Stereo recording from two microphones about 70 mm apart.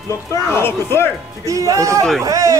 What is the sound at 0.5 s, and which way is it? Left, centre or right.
Speech, left.